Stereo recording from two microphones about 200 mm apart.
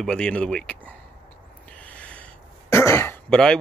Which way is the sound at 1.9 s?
5° left (ahead or behind).